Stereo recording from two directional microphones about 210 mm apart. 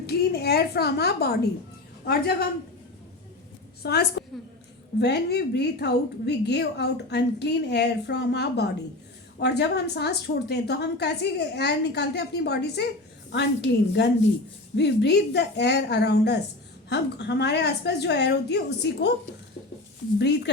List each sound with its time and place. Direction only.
0.0 s a woman's voice: 50° left (ahead or behind)
3.8 s a woman's voice: 50° left (ahead or behind)
20.1 s a woman's voice: 55° left (ahead or behind)